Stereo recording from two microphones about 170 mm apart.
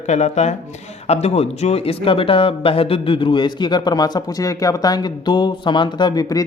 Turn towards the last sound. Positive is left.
turn(degrees=20)  # may be behind; listen again after turning